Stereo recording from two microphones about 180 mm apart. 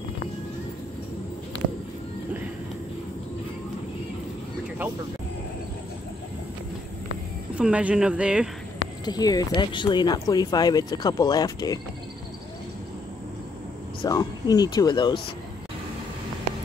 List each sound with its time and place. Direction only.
7.5 s speech: 5° right (ahead or behind)
9.0 s speech: 20° left (ahead or behind)
14.0 s speech: 20° left (ahead or behind)